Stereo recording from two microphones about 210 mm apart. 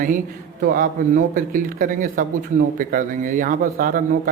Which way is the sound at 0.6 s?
40° right (ahead or behind).